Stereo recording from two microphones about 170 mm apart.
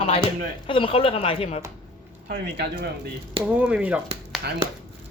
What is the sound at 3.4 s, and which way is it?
Speech, 5° right (ahead or behind).